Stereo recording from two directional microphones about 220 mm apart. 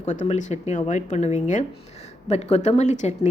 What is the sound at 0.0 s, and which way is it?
A woman's voice, 30° left (ahead or behind).